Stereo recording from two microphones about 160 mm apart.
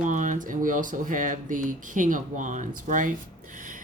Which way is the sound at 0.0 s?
50° right (ahead or behind).